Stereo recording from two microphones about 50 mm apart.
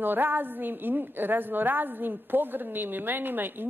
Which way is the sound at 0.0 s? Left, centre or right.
Right.